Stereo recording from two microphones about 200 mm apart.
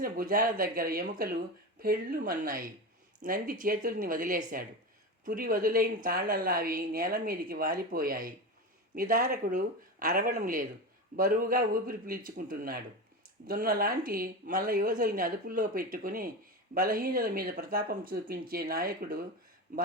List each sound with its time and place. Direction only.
0.0 s a woman's voice: 45° right (ahead or behind)